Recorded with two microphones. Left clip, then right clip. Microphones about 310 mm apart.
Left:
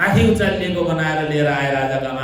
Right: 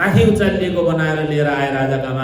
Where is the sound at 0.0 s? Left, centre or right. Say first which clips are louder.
Right 1 dB; centre.